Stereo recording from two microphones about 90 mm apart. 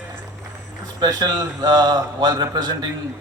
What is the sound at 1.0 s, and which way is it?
Speech, 45° right (ahead or behind).